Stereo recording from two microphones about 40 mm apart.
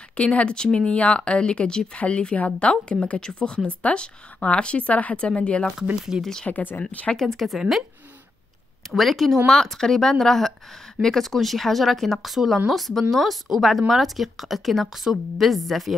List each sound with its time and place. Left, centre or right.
0.2 s speech: left
6.1 s speech: centre
6.5 s speech: left
7.2 s speech: centre
8.9 s speech: centre